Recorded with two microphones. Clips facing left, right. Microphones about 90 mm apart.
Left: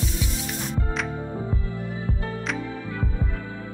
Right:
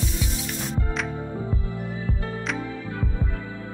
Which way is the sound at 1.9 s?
20° left (ahead or behind).